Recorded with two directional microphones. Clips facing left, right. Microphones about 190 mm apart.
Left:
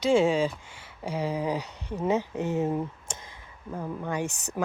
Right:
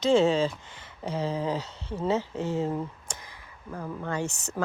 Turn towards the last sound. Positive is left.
turn(degrees=15)  # may be behind; listen again after turning